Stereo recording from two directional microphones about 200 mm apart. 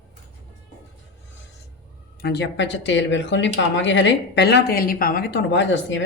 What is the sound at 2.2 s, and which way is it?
Speech, 55° left (ahead or behind).